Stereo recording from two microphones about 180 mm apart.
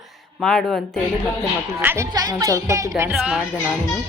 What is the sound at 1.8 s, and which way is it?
Speech, 10° right (ahead or behind).